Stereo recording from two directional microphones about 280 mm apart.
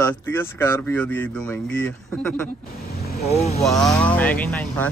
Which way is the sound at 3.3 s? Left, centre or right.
Left.